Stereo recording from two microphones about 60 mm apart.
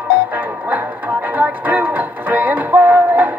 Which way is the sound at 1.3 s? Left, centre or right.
Right.